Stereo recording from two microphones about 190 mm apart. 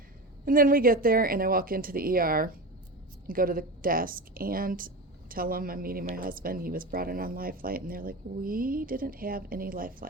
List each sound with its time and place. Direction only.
0.4 s speech: 50° right (ahead or behind)